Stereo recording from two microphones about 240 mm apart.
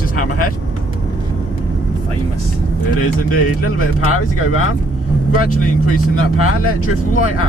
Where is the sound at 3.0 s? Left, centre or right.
Left.